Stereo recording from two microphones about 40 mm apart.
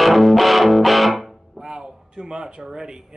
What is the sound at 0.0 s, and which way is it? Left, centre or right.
Music, centre.